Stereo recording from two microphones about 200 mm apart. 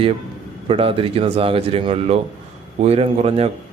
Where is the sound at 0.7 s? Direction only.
30° right (ahead or behind).